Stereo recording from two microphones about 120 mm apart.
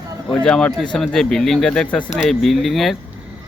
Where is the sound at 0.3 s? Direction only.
5° left (ahead or behind).